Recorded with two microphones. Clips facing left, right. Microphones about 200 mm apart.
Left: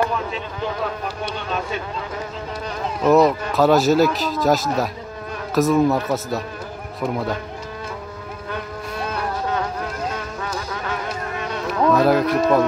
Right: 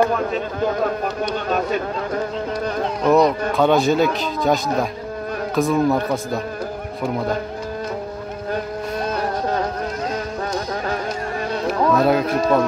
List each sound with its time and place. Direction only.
0.0 s speech: 50° right (ahead or behind)
3.0 s a man's voice: 5° left (ahead or behind)
10.1 s music: 40° right (ahead or behind)
11.9 s a man's voice: centre (ahead or behind)